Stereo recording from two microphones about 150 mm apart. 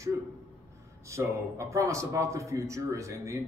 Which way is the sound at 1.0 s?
20° right (ahead or behind).